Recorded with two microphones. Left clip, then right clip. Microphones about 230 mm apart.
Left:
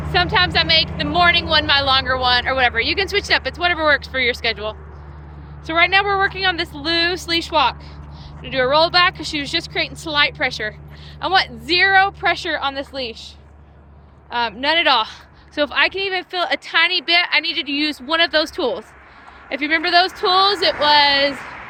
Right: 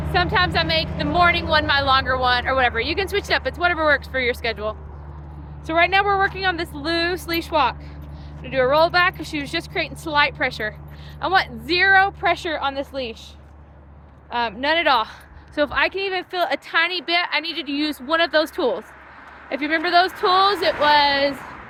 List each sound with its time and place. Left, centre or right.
0.1 s speech: centre
14.3 s speech: centre
21.3 s a sound: left